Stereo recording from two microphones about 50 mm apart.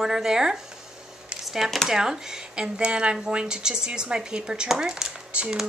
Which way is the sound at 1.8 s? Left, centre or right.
Centre.